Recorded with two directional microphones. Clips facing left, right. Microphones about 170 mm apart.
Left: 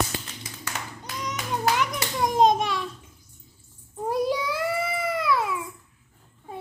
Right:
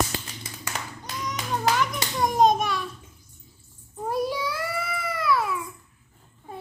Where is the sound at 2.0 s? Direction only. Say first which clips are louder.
Left 1 dB; 20° left (ahead or behind).